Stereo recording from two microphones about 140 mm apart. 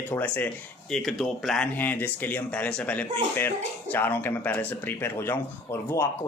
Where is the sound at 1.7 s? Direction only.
10° left (ahead or behind).